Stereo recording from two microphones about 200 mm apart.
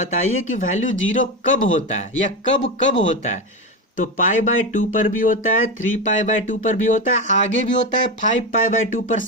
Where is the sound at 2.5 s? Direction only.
65° left (ahead or behind).